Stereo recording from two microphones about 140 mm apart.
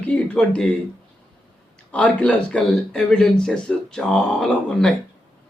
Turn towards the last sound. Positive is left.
turn(degrees=5)  # may be behind; listen again after turning